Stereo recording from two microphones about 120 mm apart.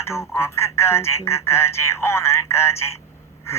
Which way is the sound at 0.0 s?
20° left (ahead or behind).